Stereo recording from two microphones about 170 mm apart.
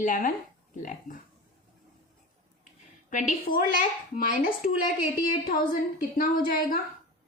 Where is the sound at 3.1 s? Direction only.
50° left (ahead or behind).